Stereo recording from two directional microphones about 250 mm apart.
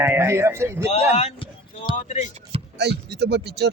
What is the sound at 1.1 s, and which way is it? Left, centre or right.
Speech, left.